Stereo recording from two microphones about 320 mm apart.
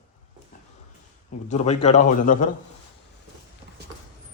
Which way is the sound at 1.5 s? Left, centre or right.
Left.